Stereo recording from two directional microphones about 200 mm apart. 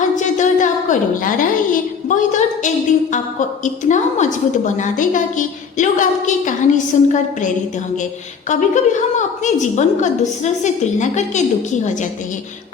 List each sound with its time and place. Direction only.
0.2 s a woman's voice: 40° left (ahead or behind)